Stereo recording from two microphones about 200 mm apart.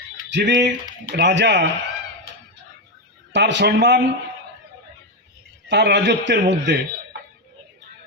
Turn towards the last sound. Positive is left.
turn(degrees=-60)  # may be behind; listen again after turning